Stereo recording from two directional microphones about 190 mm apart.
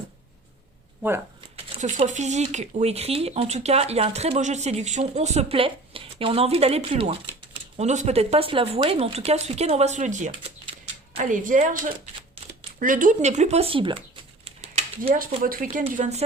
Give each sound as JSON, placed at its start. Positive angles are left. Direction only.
{"t": 1.8, "sound": "speech", "side_deg": -40}
{"t": 14.4, "sound": "a sound", "side_deg": -35}
{"t": 15.6, "sound": "speech", "side_deg": -35}